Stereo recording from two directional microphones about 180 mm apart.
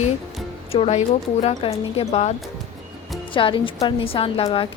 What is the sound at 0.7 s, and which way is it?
A woman's voice, 35° left (ahead or behind).